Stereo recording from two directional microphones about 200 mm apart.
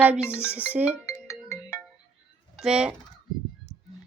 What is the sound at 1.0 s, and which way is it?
Music, 15° left (ahead or behind).